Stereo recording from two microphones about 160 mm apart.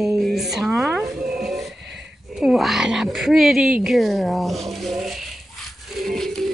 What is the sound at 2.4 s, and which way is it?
Speech, centre (ahead or behind).